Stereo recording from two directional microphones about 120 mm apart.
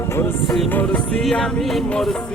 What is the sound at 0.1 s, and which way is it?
Music, 20° left (ahead or behind).